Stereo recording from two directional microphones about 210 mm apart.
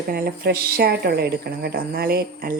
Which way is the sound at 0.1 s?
45° right (ahead or behind).